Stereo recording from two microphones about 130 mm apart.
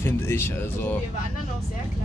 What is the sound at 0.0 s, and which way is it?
Speech, 20° left (ahead or behind).